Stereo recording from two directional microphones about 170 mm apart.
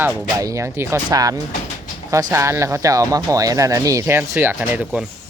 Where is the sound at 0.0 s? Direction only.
20° right (ahead or behind).